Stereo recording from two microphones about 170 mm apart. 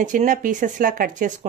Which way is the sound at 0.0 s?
50° right (ahead or behind).